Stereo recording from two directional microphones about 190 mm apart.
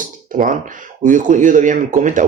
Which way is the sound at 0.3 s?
45° right (ahead or behind).